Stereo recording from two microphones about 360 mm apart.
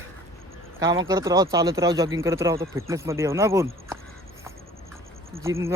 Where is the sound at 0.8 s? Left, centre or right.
Centre.